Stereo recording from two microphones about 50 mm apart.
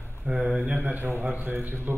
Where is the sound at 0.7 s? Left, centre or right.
Right.